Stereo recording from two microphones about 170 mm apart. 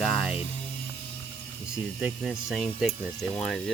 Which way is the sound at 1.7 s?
5° right (ahead or behind).